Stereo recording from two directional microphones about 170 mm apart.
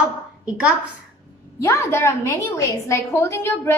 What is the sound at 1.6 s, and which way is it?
A woman's voice, 15° left (ahead or behind).